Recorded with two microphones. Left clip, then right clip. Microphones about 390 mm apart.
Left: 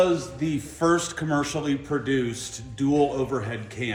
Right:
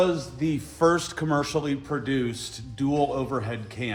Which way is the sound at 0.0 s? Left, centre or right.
Centre.